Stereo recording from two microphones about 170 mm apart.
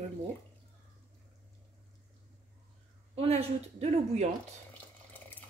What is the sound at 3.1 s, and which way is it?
Speech, 35° right (ahead or behind).